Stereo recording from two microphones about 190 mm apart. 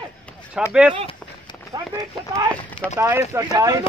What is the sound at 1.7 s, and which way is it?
Clip-clop, 25° right (ahead or behind).